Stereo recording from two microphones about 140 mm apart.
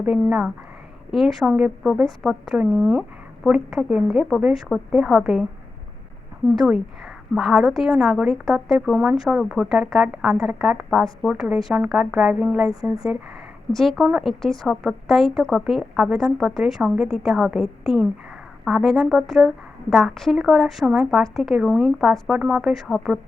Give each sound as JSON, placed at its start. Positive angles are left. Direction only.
{"t": 0.3, "sound": "a woman's voice", "side_deg": -10}
{"t": 6.6, "sound": "a woman's voice", "side_deg": 0}